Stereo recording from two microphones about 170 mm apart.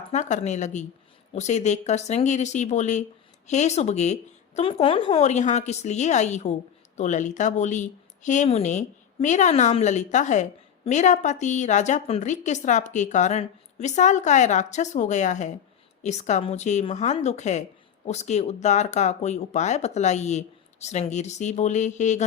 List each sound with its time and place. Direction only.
0.1 s a woman's voice: 45° left (ahead or behind)